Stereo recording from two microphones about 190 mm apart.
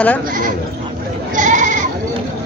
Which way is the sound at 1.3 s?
40° right (ahead or behind).